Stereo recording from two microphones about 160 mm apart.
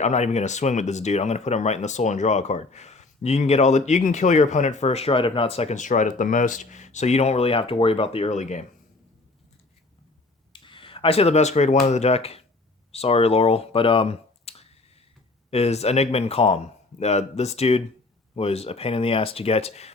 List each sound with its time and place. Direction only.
0.0 s speech: 45° left (ahead or behind)
10.5 s speech: 30° left (ahead or behind)